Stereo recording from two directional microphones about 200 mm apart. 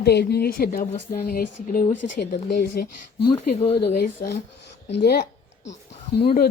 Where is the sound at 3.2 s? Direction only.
30° left (ahead or behind).